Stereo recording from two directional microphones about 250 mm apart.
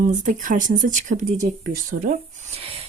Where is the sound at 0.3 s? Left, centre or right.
Right.